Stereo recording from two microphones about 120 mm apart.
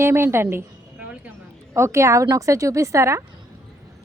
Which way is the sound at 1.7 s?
25° right (ahead or behind).